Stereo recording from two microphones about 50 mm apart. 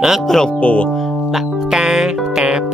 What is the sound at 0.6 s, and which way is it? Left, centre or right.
Speech, left.